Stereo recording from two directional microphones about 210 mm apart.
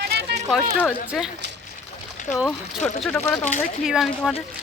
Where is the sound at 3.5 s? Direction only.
35° left (ahead or behind).